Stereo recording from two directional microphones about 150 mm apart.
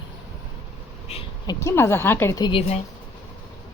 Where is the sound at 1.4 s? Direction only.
20° left (ahead or behind).